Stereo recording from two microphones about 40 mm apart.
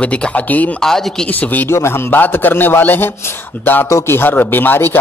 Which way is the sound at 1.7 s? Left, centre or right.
Left.